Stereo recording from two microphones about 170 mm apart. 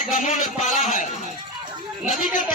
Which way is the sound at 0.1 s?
45° left (ahead or behind).